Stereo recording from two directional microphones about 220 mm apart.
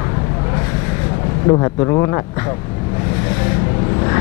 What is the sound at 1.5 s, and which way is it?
Speech, 20° left (ahead or behind).